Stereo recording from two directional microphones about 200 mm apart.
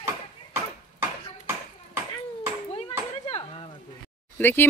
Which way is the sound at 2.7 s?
30° left (ahead or behind).